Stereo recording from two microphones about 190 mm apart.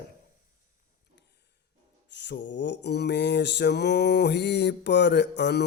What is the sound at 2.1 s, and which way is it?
Mantra, 65° left (ahead or behind).